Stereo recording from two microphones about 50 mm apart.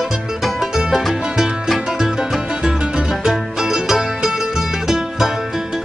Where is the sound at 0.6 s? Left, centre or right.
Centre.